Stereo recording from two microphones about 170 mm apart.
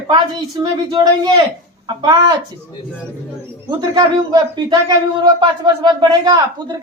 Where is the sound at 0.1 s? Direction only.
30° right (ahead or behind).